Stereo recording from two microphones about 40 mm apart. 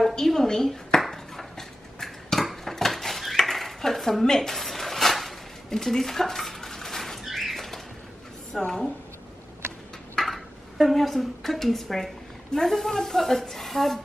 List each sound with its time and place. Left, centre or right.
0.1 s speech: centre
1.1 s dog: centre
2.4 s dishes: centre
4.4 s a sound: centre
5.7 s dishes: centre
7.3 s bird flight: centre
8.5 s a woman's voice: centre
10.1 s a woman's voice: centre